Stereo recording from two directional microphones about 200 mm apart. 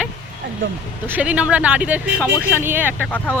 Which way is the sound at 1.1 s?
5° right (ahead or behind).